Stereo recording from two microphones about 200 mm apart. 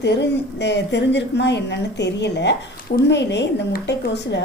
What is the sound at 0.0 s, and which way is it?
A woman's voice, 60° left (ahead or behind).